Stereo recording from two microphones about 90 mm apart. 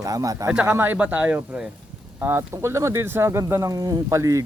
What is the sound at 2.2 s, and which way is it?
Speech, 30° right (ahead or behind).